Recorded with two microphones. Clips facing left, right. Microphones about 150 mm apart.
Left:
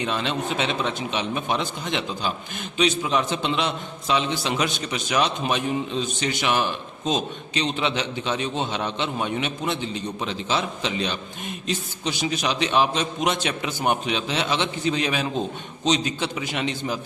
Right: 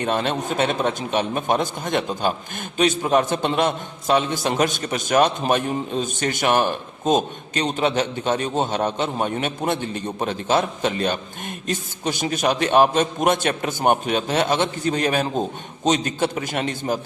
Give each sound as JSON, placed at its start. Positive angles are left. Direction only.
{"t": 0.0, "sound": "a man's voice", "side_deg": -50}